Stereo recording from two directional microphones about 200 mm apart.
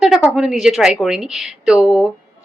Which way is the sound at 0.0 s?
Centre (ahead or behind).